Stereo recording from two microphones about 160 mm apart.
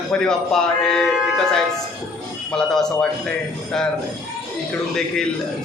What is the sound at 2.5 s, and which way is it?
Speech, 5° left (ahead or behind).